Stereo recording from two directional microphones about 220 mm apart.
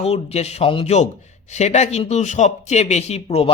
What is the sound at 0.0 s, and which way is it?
Speech, 30° left (ahead or behind).